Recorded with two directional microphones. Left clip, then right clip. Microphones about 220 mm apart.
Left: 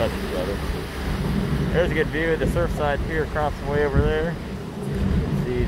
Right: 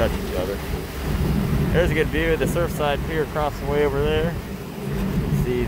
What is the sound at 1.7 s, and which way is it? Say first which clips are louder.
Speech: right 1 dB; 20° right (ahead or behind).